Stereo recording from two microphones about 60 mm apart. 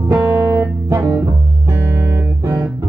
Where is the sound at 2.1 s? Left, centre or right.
Right.